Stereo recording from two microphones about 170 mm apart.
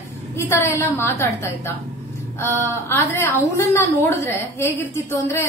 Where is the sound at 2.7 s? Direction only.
15° left (ahead or behind).